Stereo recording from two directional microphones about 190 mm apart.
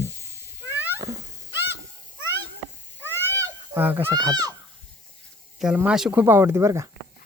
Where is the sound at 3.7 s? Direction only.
10° right (ahead or behind).